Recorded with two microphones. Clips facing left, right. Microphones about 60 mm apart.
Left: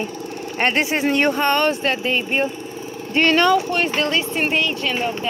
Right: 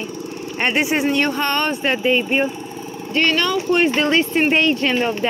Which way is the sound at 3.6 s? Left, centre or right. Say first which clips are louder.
Right 4 dB; centre.